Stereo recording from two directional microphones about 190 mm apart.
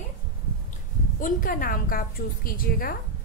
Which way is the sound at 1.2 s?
45° left (ahead or behind).